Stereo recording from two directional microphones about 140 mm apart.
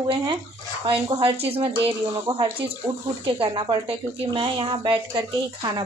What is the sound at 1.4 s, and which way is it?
Speech, 45° right (ahead or behind).